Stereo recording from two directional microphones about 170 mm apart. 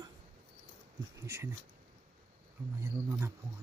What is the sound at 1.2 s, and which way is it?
Speech, 15° right (ahead or behind).